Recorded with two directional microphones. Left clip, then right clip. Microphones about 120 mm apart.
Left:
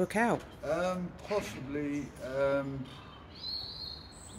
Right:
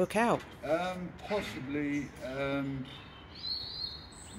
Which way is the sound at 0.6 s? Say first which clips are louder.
Even; 50° left (ahead or behind).